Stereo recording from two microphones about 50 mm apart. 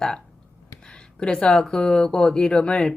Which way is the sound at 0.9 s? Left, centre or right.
Centre.